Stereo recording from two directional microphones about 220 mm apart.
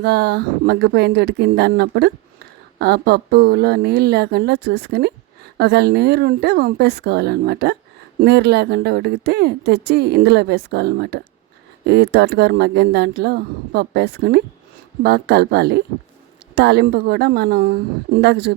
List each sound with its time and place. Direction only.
0.0 s speech: 50° right (ahead or behind)